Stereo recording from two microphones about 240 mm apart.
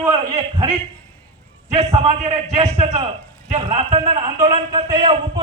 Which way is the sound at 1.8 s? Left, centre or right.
Right.